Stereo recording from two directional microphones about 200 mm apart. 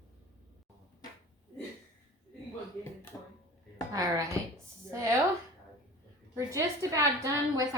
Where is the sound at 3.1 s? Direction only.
10° left (ahead or behind).